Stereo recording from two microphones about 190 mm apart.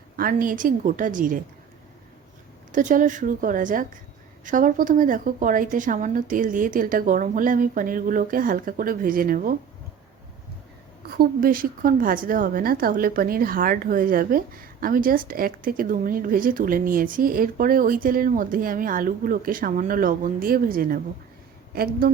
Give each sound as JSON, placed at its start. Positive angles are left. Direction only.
{"t": 0.2, "sound": "a woman's voice", "side_deg": -50}
{"t": 2.7, "sound": "a woman's voice", "side_deg": -45}
{"t": 11.2, "sound": "a woman's voice", "side_deg": -50}